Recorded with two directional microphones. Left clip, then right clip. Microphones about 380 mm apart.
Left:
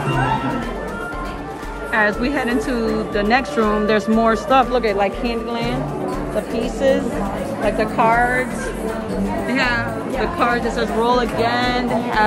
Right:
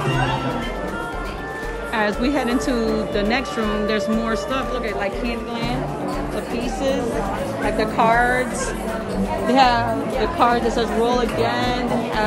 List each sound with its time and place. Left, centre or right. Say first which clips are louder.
2.0 s a woman's voice: left 3 dB; centre
7.7 s a woman's voice: left 1 dB; centre
9.5 s a woman's voice: right 5 dB; centre